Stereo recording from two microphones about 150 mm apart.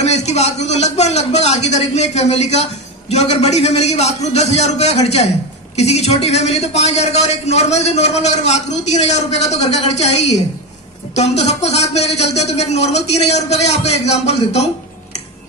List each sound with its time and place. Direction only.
0.0 s a man's voice: 45° left (ahead or behind)